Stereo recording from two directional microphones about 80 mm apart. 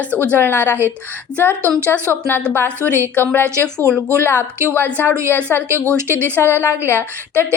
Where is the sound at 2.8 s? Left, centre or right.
Right.